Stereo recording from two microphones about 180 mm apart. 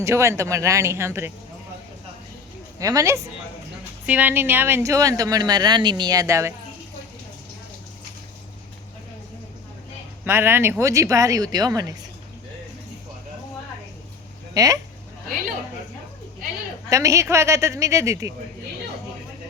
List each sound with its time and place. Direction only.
0.0 s speech: 15° right (ahead or behind)
2.7 s speech: 20° right (ahead or behind)
10.2 s speech: 10° right (ahead or behind)
14.5 s speech: 20° right (ahead or behind)
16.9 s speech: 15° right (ahead or behind)